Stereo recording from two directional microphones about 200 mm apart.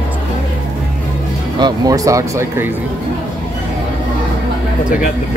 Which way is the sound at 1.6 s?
20° right (ahead or behind).